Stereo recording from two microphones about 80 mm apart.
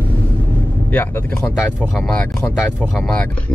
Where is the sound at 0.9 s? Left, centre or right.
Left.